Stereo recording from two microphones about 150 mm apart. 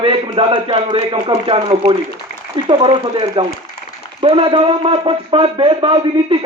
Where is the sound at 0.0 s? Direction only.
35° right (ahead or behind).